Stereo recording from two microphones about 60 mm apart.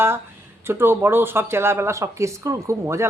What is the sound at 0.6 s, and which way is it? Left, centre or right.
A woman's voice, right.